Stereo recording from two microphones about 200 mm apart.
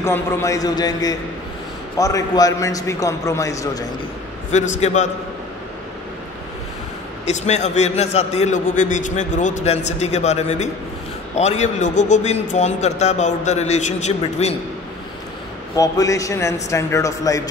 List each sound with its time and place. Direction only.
0.0 s a man's voice: 15° left (ahead or behind)
4.5 s a man's voice: 35° left (ahead or behind)
7.2 s a man's voice: 35° left (ahead or behind)
15.7 s a man's voice: 15° left (ahead or behind)